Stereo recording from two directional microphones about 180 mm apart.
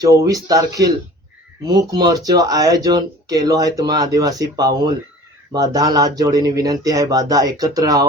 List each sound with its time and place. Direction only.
0.0 s speech: 20° right (ahead or behind)